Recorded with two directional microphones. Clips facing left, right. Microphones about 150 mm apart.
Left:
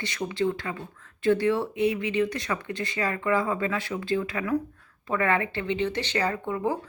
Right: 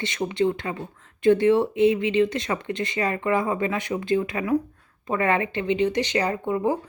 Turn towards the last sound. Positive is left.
turn(degrees=-15)  # may be behind; listen again after turning